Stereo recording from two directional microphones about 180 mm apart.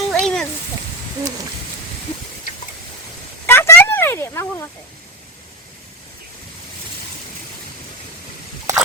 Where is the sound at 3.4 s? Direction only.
15° left (ahead or behind).